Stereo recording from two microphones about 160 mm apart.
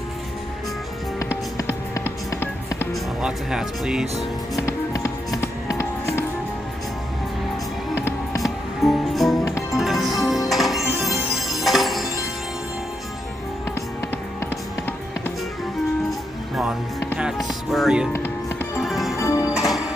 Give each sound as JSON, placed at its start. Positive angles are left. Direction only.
{"t": 1.6, "sound": "music", "side_deg": 20}
{"t": 2.9, "sound": "speech", "side_deg": -5}
{"t": 4.6, "sound": "music", "side_deg": 20}
{"t": 7.9, "sound": "music", "side_deg": 15}
{"t": 8.4, "sound": "music", "side_deg": 0}
{"t": 16.1, "sound": "music", "side_deg": 0}
{"t": 19.1, "sound": "music", "side_deg": 20}
{"t": 19.5, "sound": "music", "side_deg": 0}